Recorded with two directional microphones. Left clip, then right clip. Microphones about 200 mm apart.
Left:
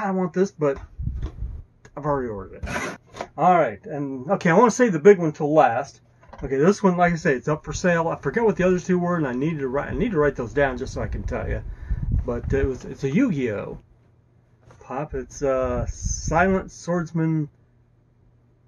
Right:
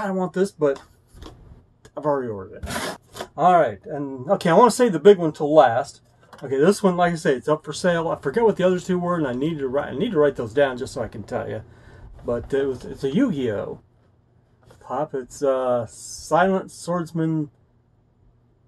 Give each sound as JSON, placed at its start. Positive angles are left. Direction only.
{"t": 0.0, "sound": "speech", "side_deg": 10}
{"t": 1.8, "sound": "speech", "side_deg": 10}
{"t": 3.4, "sound": "speech", "side_deg": 0}
{"t": 6.7, "sound": "speech", "side_deg": 15}
{"t": 8.8, "sound": "speech", "side_deg": 0}
{"t": 10.0, "sound": "speech", "side_deg": 0}
{"t": 10.6, "sound": "speech", "side_deg": 15}
{"t": 14.9, "sound": "speech", "side_deg": 15}